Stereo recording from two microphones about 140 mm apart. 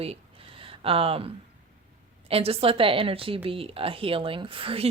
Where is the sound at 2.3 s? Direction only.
45° right (ahead or behind).